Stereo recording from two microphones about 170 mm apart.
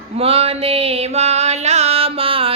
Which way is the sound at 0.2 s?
35° right (ahead or behind).